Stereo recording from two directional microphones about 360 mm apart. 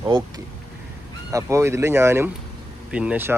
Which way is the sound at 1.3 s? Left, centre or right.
Centre.